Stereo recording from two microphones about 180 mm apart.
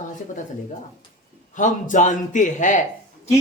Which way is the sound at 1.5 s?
45° left (ahead or behind).